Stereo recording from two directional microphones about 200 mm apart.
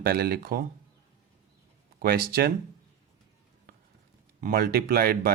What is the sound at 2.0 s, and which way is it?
Speech, 50° right (ahead or behind).